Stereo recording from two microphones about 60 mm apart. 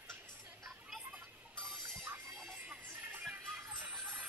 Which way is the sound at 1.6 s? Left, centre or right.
Centre.